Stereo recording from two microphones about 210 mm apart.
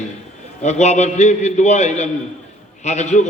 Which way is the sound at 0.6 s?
35° left (ahead or behind).